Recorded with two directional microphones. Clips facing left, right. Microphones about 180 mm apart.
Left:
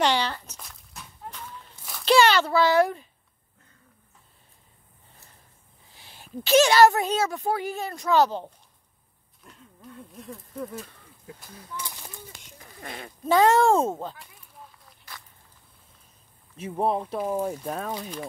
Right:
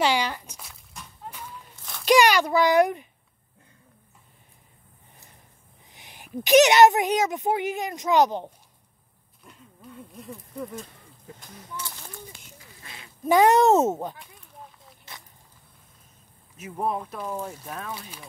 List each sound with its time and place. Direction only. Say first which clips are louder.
0.0 s walk: even; 10° right (ahead or behind)
1.8 s a sound: even; 5° left (ahead or behind)
2.0 s a child's voice: right 1 dB; 15° right (ahead or behind)
5.9 s a woman's voice: right 2 dB; 15° right (ahead or behind)
9.4 s speech: even; centre (ahead or behind)
12.8 s speech: left 10 dB; 55° left (ahead or behind)
13.2 s speech: right 1 dB; 15° right (ahead or behind)
15.1 s walk: even; 25° right (ahead or behind)
16.5 s speech: left 3 dB; 30° left (ahead or behind)